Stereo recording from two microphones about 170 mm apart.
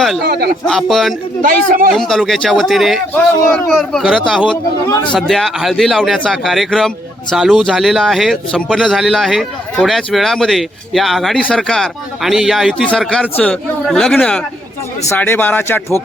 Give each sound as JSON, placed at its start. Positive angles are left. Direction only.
{"t": 0.2, "sound": "speech", "side_deg": -65}
{"t": 0.7, "sound": "speech", "side_deg": 0}
{"t": 1.4, "sound": "speech", "side_deg": -55}
{"t": 1.9, "sound": "speech", "side_deg": 0}